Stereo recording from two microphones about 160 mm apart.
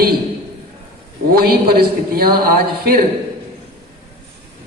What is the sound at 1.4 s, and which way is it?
A man's voice, 75° right (ahead or behind).